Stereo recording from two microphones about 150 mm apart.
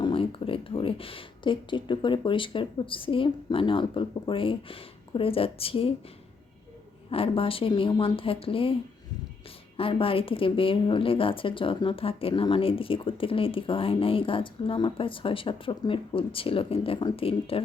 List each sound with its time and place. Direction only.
0.0 s speech: 35° left (ahead or behind)
7.1 s a woman's voice: 40° left (ahead or behind)